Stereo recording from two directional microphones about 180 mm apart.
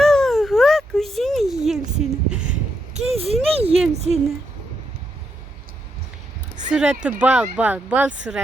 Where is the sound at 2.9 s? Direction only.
35° right (ahead or behind).